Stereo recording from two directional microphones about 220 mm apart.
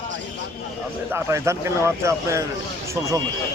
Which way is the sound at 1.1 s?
10° right (ahead or behind).